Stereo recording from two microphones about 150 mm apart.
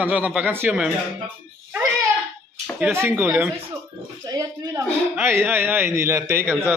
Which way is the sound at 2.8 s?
15° right (ahead or behind).